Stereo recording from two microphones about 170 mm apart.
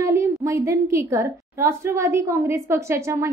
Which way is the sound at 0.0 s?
15° right (ahead or behind).